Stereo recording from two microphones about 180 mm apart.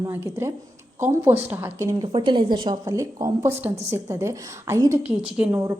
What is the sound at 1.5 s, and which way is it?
A woman's voice, 15° right (ahead or behind).